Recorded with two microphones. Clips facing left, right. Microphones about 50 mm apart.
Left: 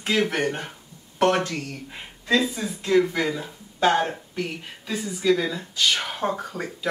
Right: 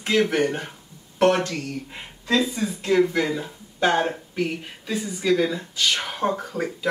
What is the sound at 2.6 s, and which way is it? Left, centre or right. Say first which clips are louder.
Speech: right 1 dB; centre.